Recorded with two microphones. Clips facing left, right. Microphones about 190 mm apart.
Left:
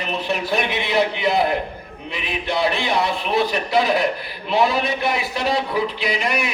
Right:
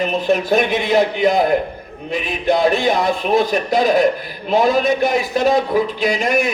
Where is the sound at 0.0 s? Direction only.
45° right (ahead or behind).